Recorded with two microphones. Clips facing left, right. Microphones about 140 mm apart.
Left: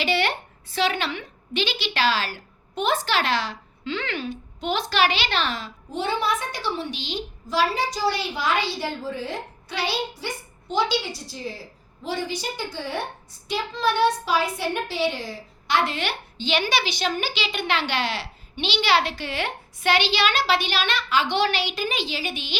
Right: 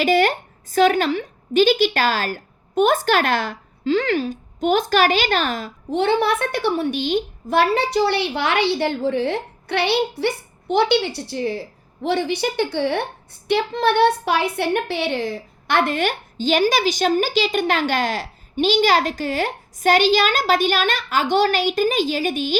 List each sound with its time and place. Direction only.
0.0 s a woman's voice: 45° right (ahead or behind)
5.9 s a woman's voice: 65° right (ahead or behind); by 22.5 s 45° right (ahead or behind)